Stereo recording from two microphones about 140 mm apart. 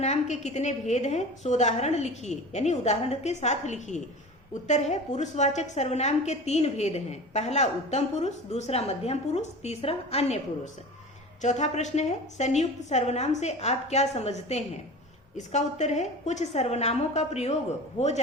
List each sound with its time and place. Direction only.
0.0 s a woman's voice: 55° left (ahead or behind)
11.4 s a woman's voice: 55° left (ahead or behind)